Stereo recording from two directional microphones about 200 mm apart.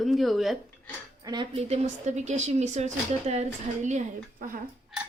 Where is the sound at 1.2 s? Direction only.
25° right (ahead or behind); by 4.6 s 40° right (ahead or behind).